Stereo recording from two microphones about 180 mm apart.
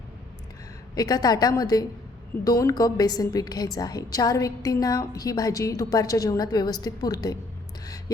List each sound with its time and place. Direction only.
0.9 s a woman's voice: 20° left (ahead or behind)